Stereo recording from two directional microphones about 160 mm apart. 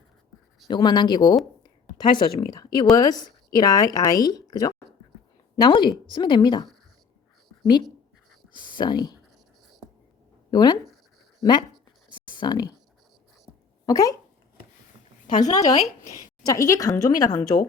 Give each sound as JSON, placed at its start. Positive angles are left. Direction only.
{"t": 0.7, "sound": "a woman's voice", "side_deg": 25}
{"t": 8.5, "sound": "speech", "side_deg": 30}
{"t": 10.5, "sound": "speech", "side_deg": 25}
{"t": 12.2, "sound": "a sound", "side_deg": 30}
{"t": 13.8, "sound": "speech", "side_deg": 20}
{"t": 15.3, "sound": "speech", "side_deg": 45}
{"t": 16.4, "sound": "speech", "side_deg": 20}